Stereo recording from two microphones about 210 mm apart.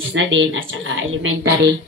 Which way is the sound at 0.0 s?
65° right (ahead or behind).